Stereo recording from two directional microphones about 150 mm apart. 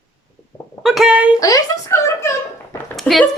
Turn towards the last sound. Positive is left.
turn(degrees=0)  # may be behind; listen again after turning